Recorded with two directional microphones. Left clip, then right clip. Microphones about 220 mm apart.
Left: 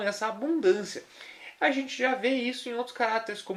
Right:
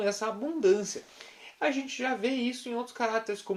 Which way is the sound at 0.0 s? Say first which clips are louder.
Left 1 dB; 30° right (ahead or behind).